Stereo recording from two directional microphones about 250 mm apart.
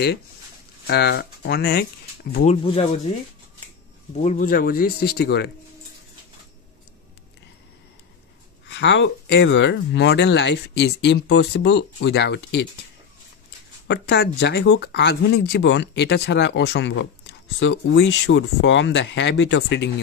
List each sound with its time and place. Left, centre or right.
0.8 s speech: left
2.4 s speech: left
4.2 s speech: left
8.6 s speech: left
13.8 s speech: left